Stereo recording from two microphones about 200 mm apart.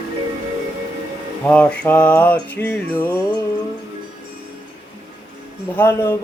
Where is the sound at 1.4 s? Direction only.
5° left (ahead or behind).